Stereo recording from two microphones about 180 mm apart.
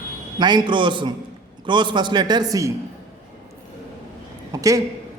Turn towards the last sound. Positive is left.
turn(degrees=-20)  # may be behind; listen again after turning